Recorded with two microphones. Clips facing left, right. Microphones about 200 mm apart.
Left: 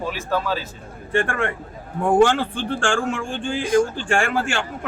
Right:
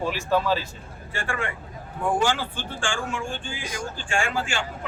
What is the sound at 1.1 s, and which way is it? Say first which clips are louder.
A man's voice: left 8 dB; 60° left (ahead or behind).